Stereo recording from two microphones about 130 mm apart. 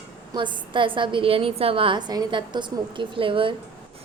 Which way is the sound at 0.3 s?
35° right (ahead or behind).